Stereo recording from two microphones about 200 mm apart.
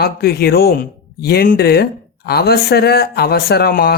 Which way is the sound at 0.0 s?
50° left (ahead or behind).